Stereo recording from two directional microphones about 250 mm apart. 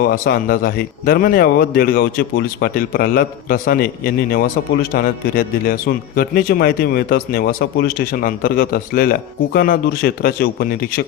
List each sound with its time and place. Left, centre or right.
0.0 s speech: left